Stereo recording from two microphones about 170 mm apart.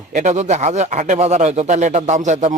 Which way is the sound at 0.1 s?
45° right (ahead or behind).